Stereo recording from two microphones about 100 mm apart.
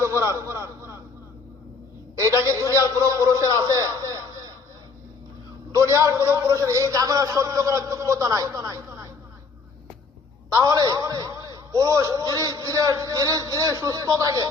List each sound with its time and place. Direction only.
0.0 s a sound: 25° right (ahead or behind)
2.2 s a man's voice: 30° right (ahead or behind)
5.7 s a man's voice: 30° right (ahead or behind)
10.5 s a man's voice: 40° right (ahead or behind)